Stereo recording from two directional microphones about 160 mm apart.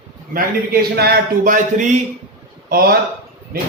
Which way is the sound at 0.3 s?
75° right (ahead or behind).